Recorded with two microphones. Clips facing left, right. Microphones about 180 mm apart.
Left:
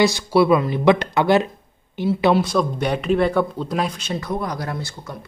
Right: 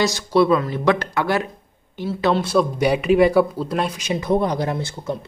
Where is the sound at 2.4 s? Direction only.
5° right (ahead or behind).